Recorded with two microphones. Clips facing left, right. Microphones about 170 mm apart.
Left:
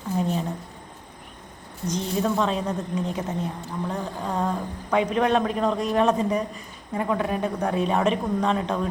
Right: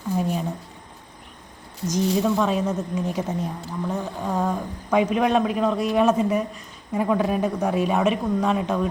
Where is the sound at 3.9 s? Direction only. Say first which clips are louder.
Right 3 dB; 5° right (ahead or behind).